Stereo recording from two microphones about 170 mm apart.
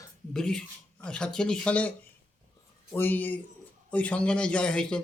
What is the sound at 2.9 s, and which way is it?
A man's voice, 10° left (ahead or behind).